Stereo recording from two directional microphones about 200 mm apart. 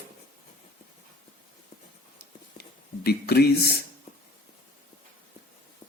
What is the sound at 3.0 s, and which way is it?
Speech, 50° left (ahead or behind).